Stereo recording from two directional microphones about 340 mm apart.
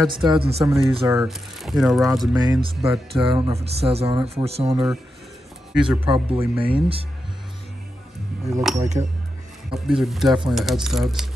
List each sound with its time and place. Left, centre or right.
0.0 s speech: centre
2.3 s speech: centre
5.8 s speech: centre
8.5 s speech: centre
8.7 s speech: centre
9.8 s speech: centre